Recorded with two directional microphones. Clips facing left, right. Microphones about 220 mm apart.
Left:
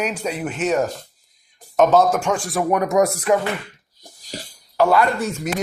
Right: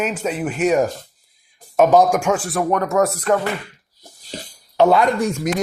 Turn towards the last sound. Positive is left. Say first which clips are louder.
# right 2 dB
turn(degrees=-15)  # may be behind; listen again after turning